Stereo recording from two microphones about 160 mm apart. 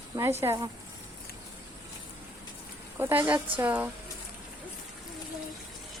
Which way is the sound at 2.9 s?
15° right (ahead or behind).